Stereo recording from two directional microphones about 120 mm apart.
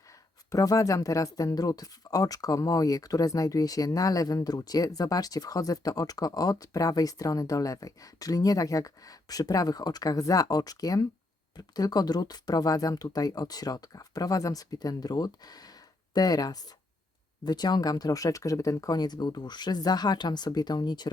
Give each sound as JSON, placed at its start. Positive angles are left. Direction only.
{"t": 0.5, "sound": "speech", "side_deg": 30}